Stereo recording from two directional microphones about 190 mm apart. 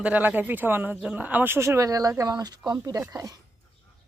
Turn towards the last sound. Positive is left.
turn(degrees=-15)  # may be behind; listen again after turning